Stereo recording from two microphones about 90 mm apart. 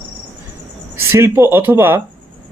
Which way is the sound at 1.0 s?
30° right (ahead or behind).